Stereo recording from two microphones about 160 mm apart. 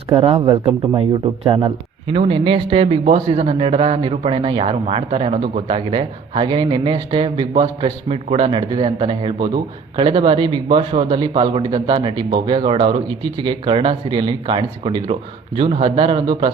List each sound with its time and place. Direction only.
0.2 s speech: 25° right (ahead or behind)
2.1 s speech: 35° right (ahead or behind)